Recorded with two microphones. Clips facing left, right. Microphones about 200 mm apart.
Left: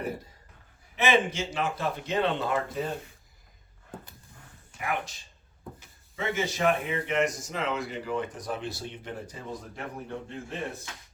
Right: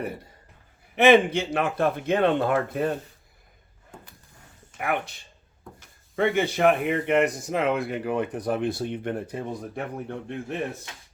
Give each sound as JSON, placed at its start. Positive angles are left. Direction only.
{"t": 0.9, "sound": "speech", "side_deg": -60}
{"t": 4.8, "sound": "speech", "side_deg": -60}